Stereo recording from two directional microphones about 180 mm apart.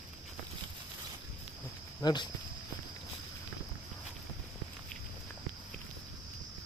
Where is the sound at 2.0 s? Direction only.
20° left (ahead or behind).